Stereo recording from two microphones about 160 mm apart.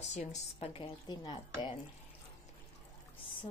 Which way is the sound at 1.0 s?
30° left (ahead or behind).